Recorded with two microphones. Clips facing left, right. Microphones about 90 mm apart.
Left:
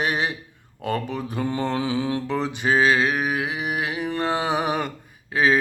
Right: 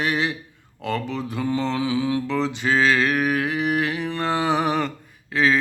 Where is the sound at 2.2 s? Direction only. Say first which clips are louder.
Right 2 dB; 20° left (ahead or behind).